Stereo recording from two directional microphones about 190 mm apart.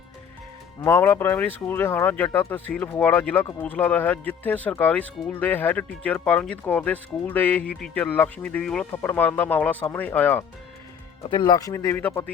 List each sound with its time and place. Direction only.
0.9 s speech: 10° left (ahead or behind)
11.3 s speech: 25° left (ahead or behind)